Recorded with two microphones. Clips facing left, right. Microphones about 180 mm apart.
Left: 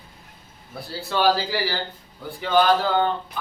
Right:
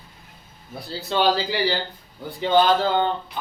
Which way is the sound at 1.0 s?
20° right (ahead or behind).